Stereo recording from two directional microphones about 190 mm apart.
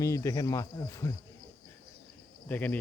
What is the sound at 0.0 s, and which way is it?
Speech, 15° left (ahead or behind).